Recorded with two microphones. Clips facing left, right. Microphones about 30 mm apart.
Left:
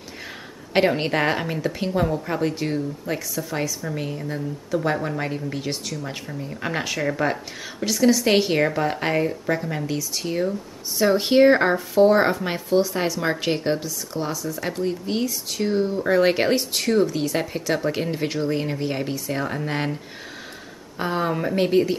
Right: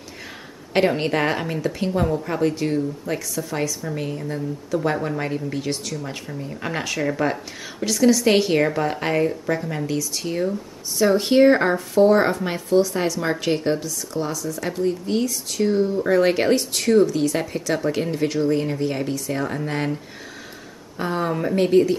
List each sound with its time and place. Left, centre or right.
0.7 s a woman's voice: centre
21.0 s speech: centre